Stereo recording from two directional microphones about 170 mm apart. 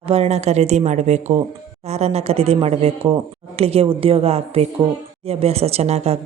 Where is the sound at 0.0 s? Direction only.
35° right (ahead or behind).